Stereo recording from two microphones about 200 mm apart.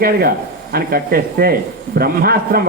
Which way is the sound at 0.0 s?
50° right (ahead or behind).